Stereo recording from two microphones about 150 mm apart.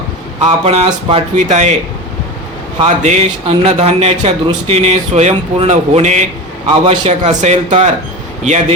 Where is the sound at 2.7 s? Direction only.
45° right (ahead or behind).